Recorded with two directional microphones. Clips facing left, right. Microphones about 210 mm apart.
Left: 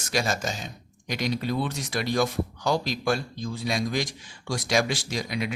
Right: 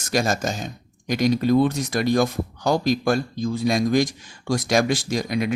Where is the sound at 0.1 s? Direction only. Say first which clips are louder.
Right 5 dB; 45° right (ahead or behind).